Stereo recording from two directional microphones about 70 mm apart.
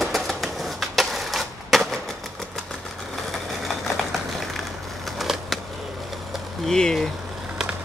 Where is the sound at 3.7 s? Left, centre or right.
Centre.